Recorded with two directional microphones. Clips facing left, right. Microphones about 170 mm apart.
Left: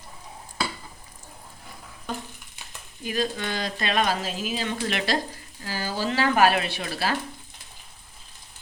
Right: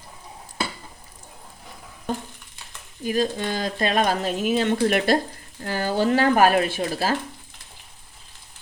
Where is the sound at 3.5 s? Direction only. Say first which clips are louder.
Right 4 dB; 45° right (ahead or behind).